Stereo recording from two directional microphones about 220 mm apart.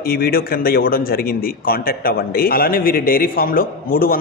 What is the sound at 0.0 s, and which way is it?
Speech, 40° left (ahead or behind).